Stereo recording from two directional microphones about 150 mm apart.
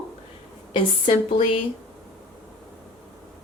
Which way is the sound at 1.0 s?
40° left (ahead or behind).